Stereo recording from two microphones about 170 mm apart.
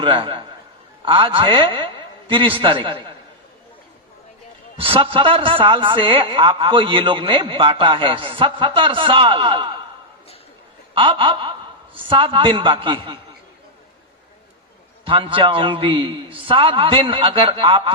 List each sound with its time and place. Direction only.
0.0 s a man's voice: 30° right (ahead or behind)
4.8 s a man's voice: 30° right (ahead or behind)
10.9 s a man's voice: 30° right (ahead or behind)
15.0 s a man's voice: 30° right (ahead or behind)